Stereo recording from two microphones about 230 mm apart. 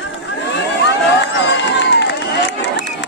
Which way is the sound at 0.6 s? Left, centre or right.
Left.